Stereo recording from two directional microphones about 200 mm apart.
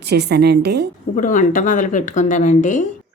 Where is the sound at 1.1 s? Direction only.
40° left (ahead or behind).